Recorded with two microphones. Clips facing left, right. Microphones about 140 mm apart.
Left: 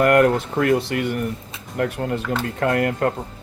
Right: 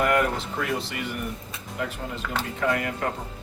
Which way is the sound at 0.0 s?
60° left (ahead or behind).